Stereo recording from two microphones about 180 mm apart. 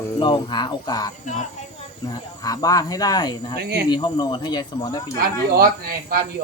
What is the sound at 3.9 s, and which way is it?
Speech, 25° left (ahead or behind).